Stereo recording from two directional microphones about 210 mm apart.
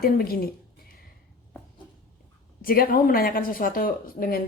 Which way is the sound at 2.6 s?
45° left (ahead or behind).